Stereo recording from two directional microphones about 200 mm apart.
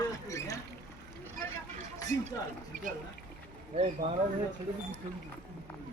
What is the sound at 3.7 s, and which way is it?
Speech, 30° right (ahead or behind).